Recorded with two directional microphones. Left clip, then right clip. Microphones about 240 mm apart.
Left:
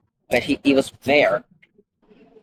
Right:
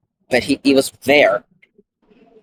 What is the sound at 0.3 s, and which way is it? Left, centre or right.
Speech, right.